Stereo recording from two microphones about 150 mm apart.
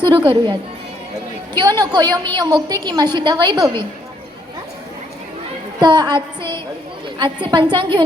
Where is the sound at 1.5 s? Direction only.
30° right (ahead or behind).